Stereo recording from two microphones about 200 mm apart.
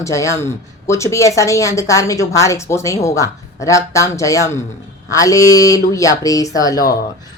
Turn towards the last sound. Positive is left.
turn(degrees=20)  # may be behind; listen again after turning